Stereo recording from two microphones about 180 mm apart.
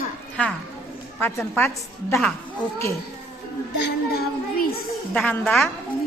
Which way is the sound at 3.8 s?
60° left (ahead or behind).